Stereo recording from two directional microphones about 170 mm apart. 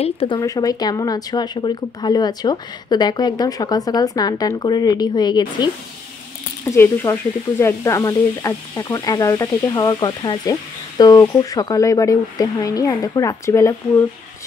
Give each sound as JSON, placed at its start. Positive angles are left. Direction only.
{"t": 0.0, "sound": "speech", "side_deg": 35}
{"t": 0.4, "sound": "speech", "side_deg": 20}
{"t": 6.6, "sound": "speech", "side_deg": 15}